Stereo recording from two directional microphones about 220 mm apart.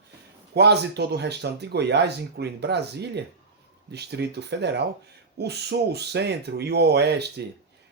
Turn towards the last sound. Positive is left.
turn(degrees=-50)  # may be behind; listen again after turning